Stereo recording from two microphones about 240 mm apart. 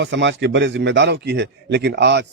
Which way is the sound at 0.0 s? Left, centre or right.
Right.